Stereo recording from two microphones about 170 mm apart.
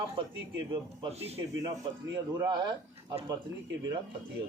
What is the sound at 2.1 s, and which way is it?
Speech, 25° right (ahead or behind).